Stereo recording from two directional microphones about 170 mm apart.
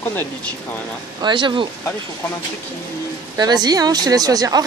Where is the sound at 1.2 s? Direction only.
30° right (ahead or behind).